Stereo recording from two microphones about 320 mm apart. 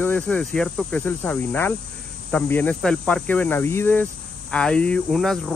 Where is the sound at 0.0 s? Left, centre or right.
Centre.